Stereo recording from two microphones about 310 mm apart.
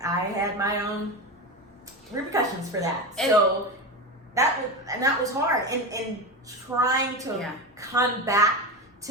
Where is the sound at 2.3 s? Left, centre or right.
Centre.